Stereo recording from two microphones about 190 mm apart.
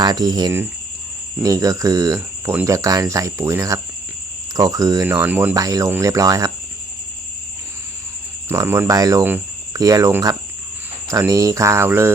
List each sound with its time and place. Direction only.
0.0 s speech: 20° right (ahead or behind)
8.4 s speech: 10° right (ahead or behind)